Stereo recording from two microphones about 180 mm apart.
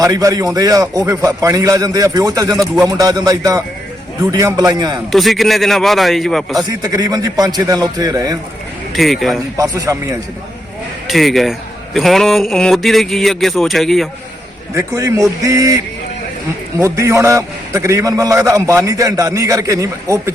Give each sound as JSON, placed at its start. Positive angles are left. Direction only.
{"t": 0.0, "sound": "a man's voice", "side_deg": -20}
{"t": 5.1, "sound": "speech", "side_deg": 0}
{"t": 6.8, "sound": "a man's voice", "side_deg": -20}
{"t": 9.0, "sound": "speech", "side_deg": 0}
{"t": 9.6, "sound": "a man's voice", "side_deg": -20}
{"t": 11.1, "sound": "speech", "side_deg": 0}
{"t": 14.8, "sound": "a man's voice", "side_deg": -15}